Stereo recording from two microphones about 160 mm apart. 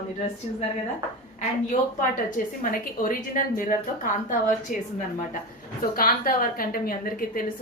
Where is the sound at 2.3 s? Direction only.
60° left (ahead or behind).